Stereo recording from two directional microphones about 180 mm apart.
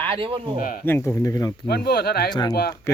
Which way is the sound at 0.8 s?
15° left (ahead or behind).